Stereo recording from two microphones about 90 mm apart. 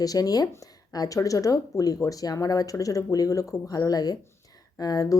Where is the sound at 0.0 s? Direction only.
45° left (ahead or behind).